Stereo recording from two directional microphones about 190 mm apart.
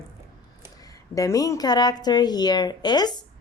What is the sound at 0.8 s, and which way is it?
A woman's voice, 20° left (ahead or behind).